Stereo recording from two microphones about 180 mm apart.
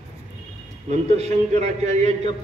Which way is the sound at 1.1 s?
40° right (ahead or behind).